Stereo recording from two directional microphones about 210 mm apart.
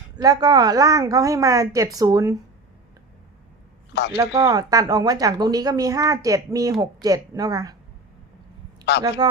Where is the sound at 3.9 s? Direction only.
55° left (ahead or behind).